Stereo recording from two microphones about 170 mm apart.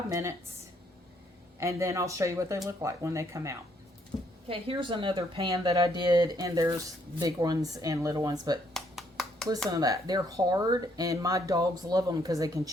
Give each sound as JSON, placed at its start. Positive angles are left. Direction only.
{"t": 0.1, "sound": "speech", "side_deg": -15}
{"t": 1.5, "sound": "speech", "side_deg": -15}
{"t": 4.1, "sound": "a sound", "side_deg": 25}
{"t": 4.4, "sound": "speech", "side_deg": -30}
{"t": 8.7, "sound": "a sound", "side_deg": 0}
{"t": 9.6, "sound": "speech", "side_deg": -20}